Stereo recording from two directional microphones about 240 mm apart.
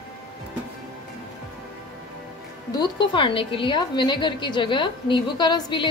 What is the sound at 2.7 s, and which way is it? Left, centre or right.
A woman's voice, centre.